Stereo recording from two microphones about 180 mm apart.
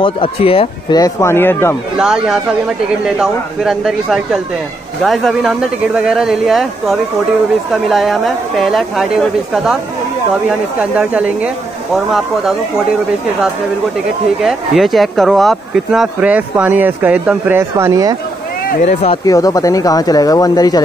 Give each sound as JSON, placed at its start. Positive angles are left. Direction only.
{"t": 0.0, "sound": "speech", "side_deg": 30}
{"t": 2.0, "sound": "a woman's voice", "side_deg": -5}
{"t": 10.8, "sound": "a woman's voice", "side_deg": -5}
{"t": 14.4, "sound": "speech", "side_deg": 0}
{"t": 18.7, "sound": "speech", "side_deg": 40}
{"t": 19.2, "sound": "speech", "side_deg": 20}